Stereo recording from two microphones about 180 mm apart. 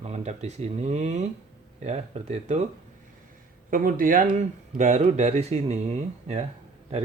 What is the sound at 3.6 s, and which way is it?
Speech, 50° right (ahead or behind).